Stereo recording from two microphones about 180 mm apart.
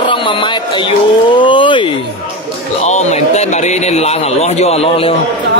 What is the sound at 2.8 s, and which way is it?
A man's voice, 40° left (ahead or behind).